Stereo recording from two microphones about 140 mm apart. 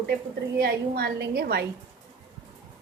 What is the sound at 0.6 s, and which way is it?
A woman's voice, 90° right.